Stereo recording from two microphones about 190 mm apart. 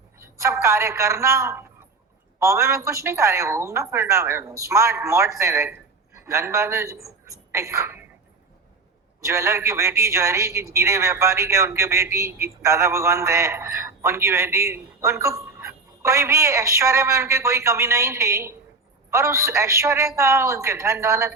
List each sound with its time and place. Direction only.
0.2 s a man's voice: 15° right (ahead or behind)
9.2 s a man's voice: 15° right (ahead or behind)